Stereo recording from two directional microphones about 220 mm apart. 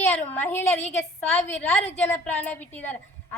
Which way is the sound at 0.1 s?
10° left (ahead or behind).